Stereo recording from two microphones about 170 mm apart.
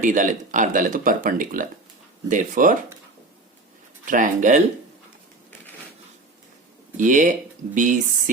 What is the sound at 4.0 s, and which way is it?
Speech, 50° right (ahead or behind).